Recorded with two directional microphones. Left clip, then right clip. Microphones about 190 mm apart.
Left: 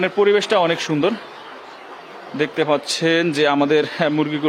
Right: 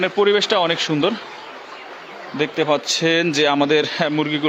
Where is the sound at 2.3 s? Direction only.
15° left (ahead or behind).